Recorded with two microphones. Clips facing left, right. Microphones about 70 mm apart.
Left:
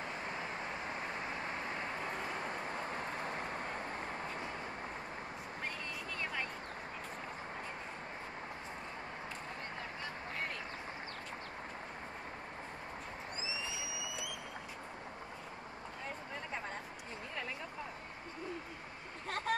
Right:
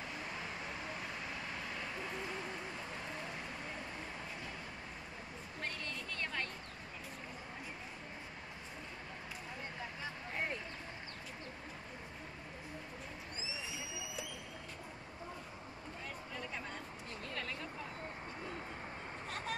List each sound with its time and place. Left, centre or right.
0.3 s vehicle: left
19.2 s vehicle: left